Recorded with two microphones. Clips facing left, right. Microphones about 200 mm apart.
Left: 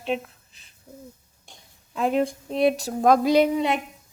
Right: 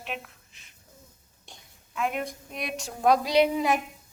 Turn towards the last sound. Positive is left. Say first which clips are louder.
# left 4 dB
turn(degrees=45)  # may be behind; listen again after turning